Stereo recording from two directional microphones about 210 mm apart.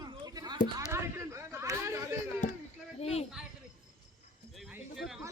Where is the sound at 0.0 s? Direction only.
20° right (ahead or behind).